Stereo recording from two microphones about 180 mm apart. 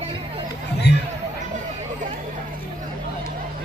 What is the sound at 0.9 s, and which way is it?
Chatter, 70° left (ahead or behind).